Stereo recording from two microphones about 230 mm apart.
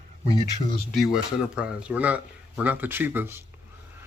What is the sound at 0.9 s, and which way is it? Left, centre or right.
Speech, centre.